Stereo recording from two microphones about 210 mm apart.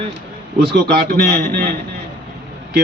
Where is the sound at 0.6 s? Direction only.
50° right (ahead or behind).